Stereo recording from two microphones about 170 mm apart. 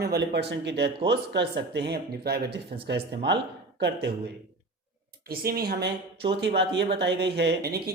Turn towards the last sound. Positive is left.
turn(degrees=-65)  # may be behind; listen again after turning